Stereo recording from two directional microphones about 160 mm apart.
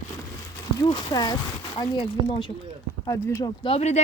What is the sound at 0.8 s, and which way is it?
Speech, 25° left (ahead or behind).